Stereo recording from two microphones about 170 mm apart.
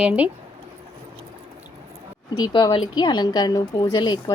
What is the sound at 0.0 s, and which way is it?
Speech, 10° right (ahead or behind).